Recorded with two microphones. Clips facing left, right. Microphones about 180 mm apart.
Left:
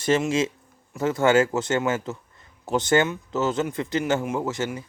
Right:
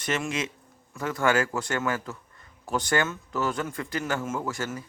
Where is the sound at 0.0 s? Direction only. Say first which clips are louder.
Left 8 dB; 30° left (ahead or behind).